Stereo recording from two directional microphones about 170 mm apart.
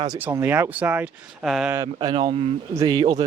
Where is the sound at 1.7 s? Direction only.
25° right (ahead or behind).